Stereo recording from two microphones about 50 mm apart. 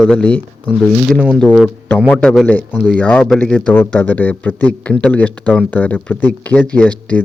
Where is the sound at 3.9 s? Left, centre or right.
Left.